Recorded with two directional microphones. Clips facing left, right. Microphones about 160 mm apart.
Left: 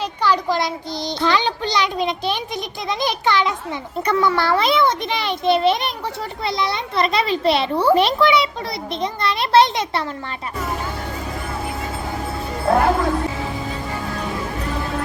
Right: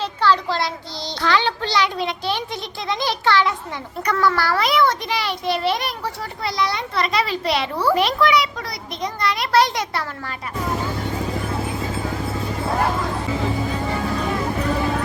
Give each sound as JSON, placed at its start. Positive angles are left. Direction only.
{"t": 0.2, "sound": "a child's voice", "side_deg": 15}
{"t": 12.7, "sound": "music", "side_deg": 65}